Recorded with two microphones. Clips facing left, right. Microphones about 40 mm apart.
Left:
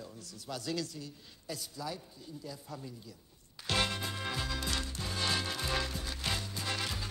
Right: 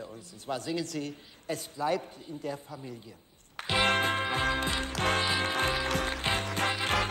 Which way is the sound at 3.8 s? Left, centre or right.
Right.